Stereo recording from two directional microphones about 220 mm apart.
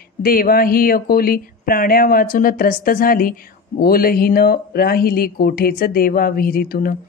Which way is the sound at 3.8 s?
40° left (ahead or behind).